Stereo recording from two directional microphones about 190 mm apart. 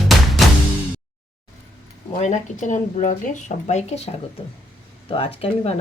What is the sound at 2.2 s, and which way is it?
Speech, 40° left (ahead or behind).